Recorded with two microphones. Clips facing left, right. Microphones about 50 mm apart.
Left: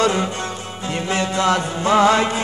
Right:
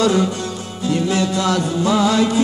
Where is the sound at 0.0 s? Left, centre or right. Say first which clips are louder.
Right 2 dB; left.